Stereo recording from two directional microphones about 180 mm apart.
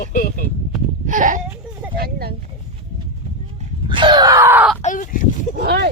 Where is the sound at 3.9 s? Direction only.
25° right (ahead or behind).